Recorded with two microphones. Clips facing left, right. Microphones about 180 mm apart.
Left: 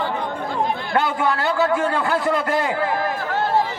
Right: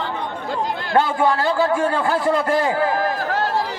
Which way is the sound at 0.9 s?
30° right (ahead or behind).